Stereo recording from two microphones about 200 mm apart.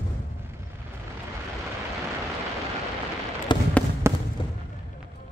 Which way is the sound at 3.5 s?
20° left (ahead or behind).